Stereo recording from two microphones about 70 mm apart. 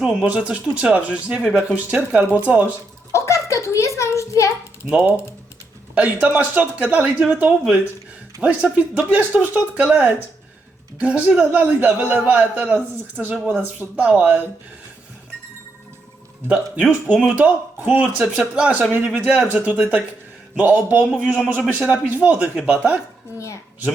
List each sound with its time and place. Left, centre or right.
0.0 s speech: centre
0.3 s a man's voice: centre
3.1 s a sound: left
4.9 s a man's voice: centre
16.5 s a man's voice: centre
19.1 s a man's voice: centre
21.2 s a man's voice: centre